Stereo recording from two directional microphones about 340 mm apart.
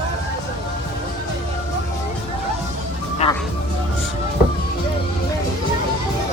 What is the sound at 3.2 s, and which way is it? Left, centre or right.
Music, centre.